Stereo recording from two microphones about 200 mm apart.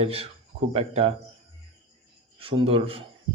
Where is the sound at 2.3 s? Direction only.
25° right (ahead or behind).